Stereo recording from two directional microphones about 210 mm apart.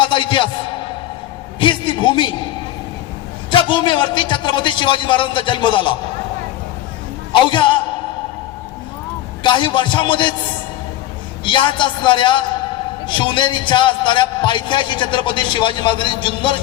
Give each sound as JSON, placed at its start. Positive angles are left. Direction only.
{"t": 0.0, "sound": "music", "side_deg": 20}
{"t": 1.5, "sound": "a man's voice", "side_deg": 25}
{"t": 3.5, "sound": "a man's voice", "side_deg": 25}
{"t": 7.5, "sound": "a man's voice", "side_deg": 20}
{"t": 9.4, "sound": "a man's voice", "side_deg": 20}
{"t": 11.4, "sound": "a man's voice", "side_deg": 20}